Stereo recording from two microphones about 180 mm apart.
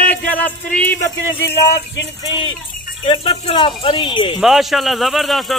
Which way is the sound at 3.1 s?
30° left (ahead or behind).